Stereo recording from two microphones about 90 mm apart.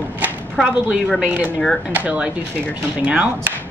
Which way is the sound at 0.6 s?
Centre (ahead or behind).